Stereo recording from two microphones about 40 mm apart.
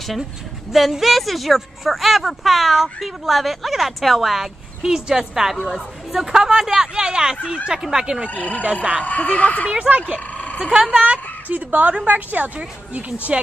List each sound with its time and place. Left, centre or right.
0.7 s speech: centre
8.3 s speech: left
9.8 s speech: right
10.3 s vehicle: left
10.6 s speech: centre
11.4 s a woman's voice: right
12.5 s speech: right